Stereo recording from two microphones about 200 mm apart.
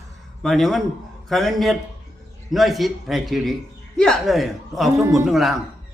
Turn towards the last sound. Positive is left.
turn(degrees=0)  # may be behind; listen again after turning